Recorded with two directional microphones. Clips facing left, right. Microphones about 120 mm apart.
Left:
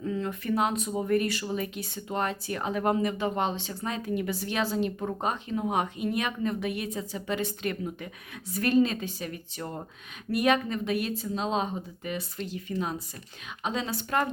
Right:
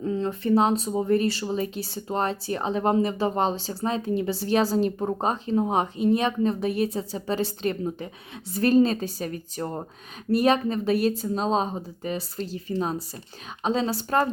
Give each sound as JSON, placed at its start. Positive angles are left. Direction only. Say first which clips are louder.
{"t": 0.0, "sound": "speech", "louder": "right 5 dB", "side_deg": -30}